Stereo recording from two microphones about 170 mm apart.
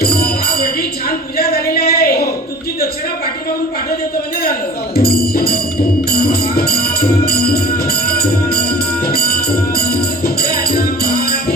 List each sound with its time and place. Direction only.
0.0 s music: 65° left (ahead or behind)
1.4 s a sound: 65° left (ahead or behind)
4.9 s music: 65° left (ahead or behind)